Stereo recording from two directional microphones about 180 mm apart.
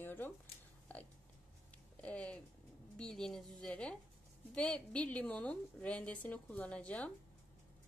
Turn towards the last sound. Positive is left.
turn(degrees=5)  # may be behind; listen again after turning